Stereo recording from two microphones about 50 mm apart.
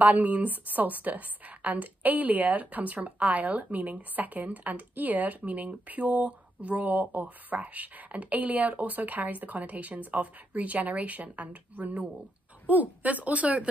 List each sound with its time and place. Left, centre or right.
0.0 s a woman's voice: right